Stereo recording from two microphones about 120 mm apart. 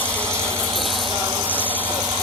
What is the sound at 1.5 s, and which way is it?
Engine, 15° right (ahead or behind).